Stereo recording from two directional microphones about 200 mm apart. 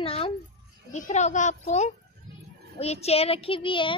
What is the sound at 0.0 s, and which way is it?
Music, 30° left (ahead or behind).